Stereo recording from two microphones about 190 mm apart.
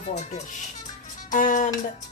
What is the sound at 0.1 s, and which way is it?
Speech, 35° left (ahead or behind).